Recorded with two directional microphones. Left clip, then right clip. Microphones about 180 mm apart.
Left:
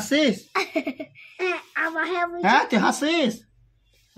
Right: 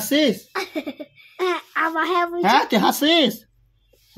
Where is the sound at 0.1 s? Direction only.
20° right (ahead or behind).